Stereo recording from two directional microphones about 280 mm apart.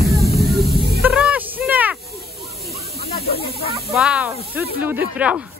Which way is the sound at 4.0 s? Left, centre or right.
Centre.